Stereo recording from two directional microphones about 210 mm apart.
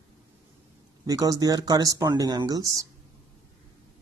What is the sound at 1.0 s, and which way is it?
Speech, 15° right (ahead or behind).